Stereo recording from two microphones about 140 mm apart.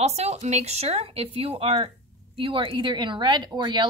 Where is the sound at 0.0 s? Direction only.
50° right (ahead or behind).